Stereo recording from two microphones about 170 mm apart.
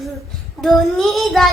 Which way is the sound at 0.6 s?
Centre (ahead or behind).